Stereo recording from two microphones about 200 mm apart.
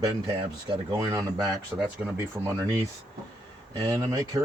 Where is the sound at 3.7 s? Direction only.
15° right (ahead or behind).